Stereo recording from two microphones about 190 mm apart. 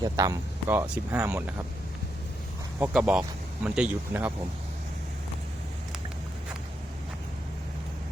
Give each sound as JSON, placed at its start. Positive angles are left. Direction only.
{"t": 0.0, "sound": "speech", "side_deg": -20}
{"t": 2.7, "sound": "speech", "side_deg": -10}